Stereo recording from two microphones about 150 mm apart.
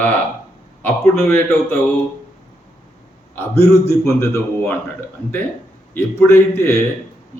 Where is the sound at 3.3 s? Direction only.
15° left (ahead or behind).